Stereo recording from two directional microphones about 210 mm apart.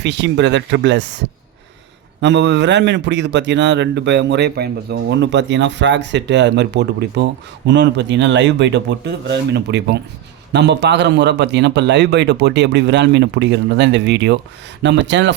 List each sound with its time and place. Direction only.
0.0 s speech: 55° right (ahead or behind)
2.2 s speech: 55° right (ahead or behind)